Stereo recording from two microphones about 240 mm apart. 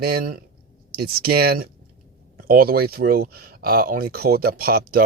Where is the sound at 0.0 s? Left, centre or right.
Right.